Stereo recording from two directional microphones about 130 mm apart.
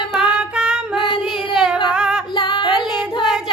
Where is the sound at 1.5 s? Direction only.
5° right (ahead or behind).